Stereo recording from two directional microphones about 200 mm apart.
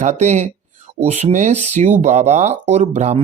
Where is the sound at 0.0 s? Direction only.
35° right (ahead or behind).